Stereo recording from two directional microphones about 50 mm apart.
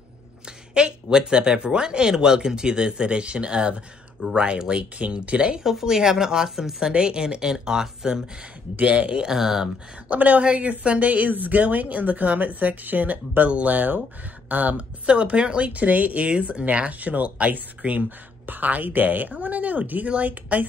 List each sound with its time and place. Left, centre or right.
0.5 s speech: centre
5.6 s speech: centre
6.9 s speech: centre
10.0 s speech: right
15.0 s speech: right